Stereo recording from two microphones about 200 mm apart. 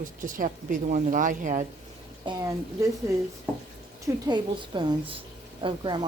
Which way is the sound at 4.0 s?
20° right (ahead or behind).